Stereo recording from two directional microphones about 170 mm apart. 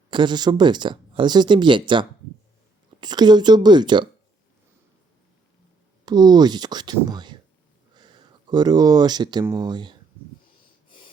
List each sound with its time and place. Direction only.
0.1 s speech: 25° right (ahead or behind)
6.1 s speech: 25° right (ahead or behind)